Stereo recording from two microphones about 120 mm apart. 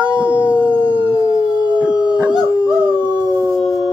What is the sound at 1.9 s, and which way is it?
Howl, 35° left (ahead or behind).